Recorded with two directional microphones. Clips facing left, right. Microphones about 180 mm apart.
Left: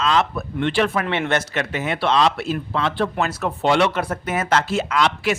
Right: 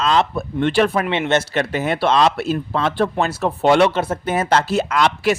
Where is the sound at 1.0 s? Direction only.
20° right (ahead or behind); by 3.9 s 40° right (ahead or behind).